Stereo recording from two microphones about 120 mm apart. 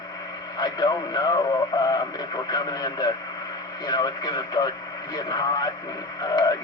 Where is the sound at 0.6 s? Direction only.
35° left (ahead or behind).